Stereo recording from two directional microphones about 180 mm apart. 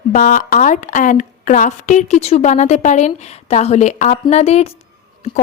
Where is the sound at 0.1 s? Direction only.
50° left (ahead or behind).